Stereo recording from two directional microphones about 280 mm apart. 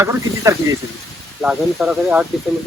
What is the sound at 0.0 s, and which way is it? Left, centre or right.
Speech, centre.